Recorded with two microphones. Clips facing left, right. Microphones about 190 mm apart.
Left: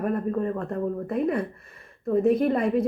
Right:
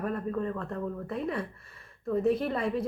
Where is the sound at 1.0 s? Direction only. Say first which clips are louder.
Left 7 dB; 50° left (ahead or behind).